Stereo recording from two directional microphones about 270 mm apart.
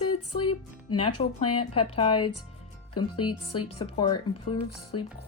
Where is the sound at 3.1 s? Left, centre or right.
Left.